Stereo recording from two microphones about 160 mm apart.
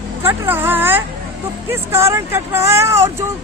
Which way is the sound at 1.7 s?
15° right (ahead or behind).